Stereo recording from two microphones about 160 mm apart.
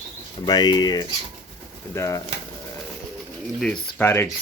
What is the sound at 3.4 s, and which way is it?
Speech, 5° left (ahead or behind).